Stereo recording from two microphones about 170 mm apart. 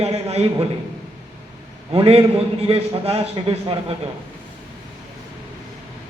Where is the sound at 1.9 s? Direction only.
35° right (ahead or behind).